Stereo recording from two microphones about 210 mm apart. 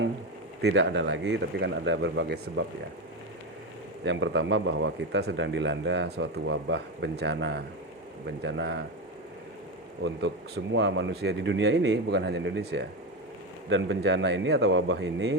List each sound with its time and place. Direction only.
0.6 s a man's voice: 60° right (ahead or behind)
4.0 s a man's voice: 60° right (ahead or behind)
10.0 s a man's voice: 55° right (ahead or behind)